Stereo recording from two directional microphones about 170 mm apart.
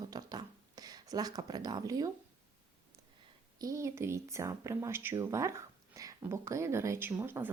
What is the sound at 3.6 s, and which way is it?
A woman's voice, 20° right (ahead or behind).